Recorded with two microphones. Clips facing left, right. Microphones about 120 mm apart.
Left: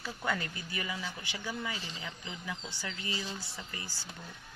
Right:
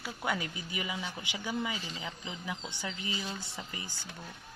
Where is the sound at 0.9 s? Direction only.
30° right (ahead or behind).